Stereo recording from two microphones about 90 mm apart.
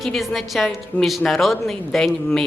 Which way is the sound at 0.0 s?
Centre (ahead or behind).